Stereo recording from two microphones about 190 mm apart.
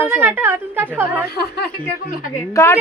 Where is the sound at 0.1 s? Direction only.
10° right (ahead or behind).